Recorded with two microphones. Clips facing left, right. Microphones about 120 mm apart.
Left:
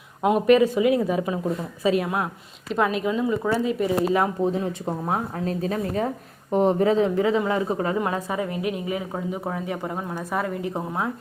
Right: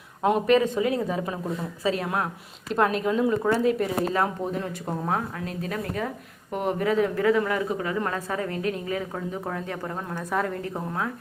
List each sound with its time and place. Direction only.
0.2 s a woman's voice: 15° left (ahead or behind)
2.7 s speech: centre (ahead or behind)
4.1 s a woman's voice: 15° left (ahead or behind)
5.5 s a woman's voice: 30° left (ahead or behind)
7.9 s a woman's voice: 15° left (ahead or behind)
10.8 s speech: 20° left (ahead or behind)